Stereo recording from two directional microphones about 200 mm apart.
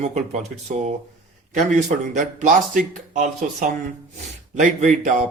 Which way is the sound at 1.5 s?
40° right (ahead or behind).